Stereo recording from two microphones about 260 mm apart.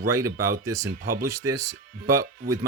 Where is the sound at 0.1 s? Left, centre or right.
Centre.